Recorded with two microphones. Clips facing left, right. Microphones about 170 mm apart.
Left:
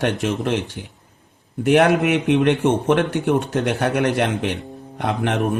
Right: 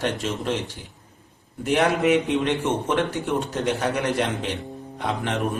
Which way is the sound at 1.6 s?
65° left (ahead or behind).